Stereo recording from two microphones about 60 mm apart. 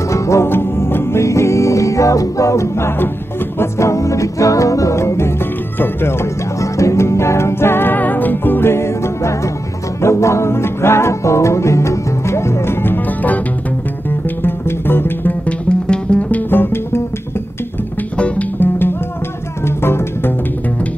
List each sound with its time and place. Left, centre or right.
0.1 s music: left
0.5 s music: left
6.6 s music: left
14.4 s music: left
15.4 s music: centre; by 17.0 s left
18.1 s music: left
18.6 s music: left